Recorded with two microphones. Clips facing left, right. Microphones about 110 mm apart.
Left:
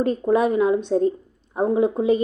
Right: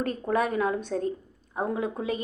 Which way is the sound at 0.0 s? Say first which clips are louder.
Left 7 dB; 20° left (ahead or behind).